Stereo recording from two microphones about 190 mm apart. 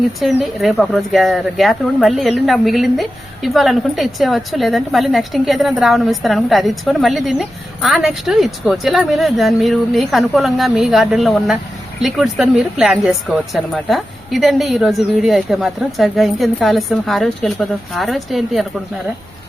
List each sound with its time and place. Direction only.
0.2 s speech: centre (ahead or behind)